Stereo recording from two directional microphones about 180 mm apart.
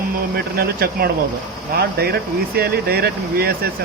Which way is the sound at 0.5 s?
60° right (ahead or behind).